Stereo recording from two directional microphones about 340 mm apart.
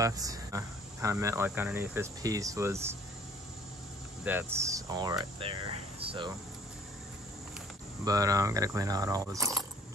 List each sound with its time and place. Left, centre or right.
0.0 s speech: centre
4.2 s speech: centre
8.0 s speech: centre